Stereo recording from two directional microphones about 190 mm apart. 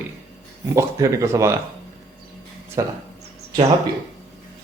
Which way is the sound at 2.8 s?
15° right (ahead or behind).